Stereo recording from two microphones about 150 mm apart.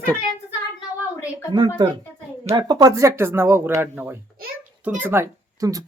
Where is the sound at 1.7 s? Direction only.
30° right (ahead or behind).